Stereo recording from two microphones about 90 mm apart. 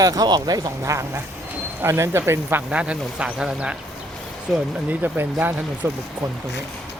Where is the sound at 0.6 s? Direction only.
35° right (ahead or behind).